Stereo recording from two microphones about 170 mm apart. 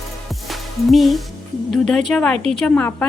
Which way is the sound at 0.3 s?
Centre (ahead or behind).